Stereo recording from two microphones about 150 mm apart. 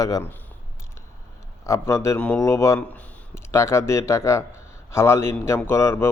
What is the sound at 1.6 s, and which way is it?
A man's voice, 20° left (ahead or behind).